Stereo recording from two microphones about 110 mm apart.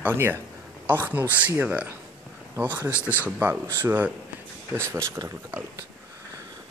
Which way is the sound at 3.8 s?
15° right (ahead or behind).